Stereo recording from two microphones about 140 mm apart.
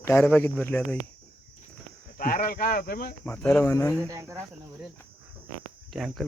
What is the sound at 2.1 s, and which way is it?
Speech, 75° left (ahead or behind).